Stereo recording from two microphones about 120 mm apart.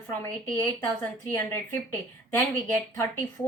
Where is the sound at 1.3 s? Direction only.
15° left (ahead or behind).